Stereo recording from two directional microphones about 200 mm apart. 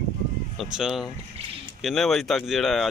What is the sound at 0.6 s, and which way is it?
Speech, centre (ahead or behind).